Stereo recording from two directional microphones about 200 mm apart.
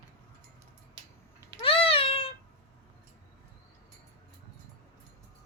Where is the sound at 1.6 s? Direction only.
25° left (ahead or behind).